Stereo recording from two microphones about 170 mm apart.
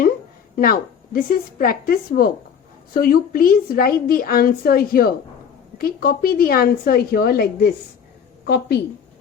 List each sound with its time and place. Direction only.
0.5 s a woman's voice: 55° left (ahead or behind)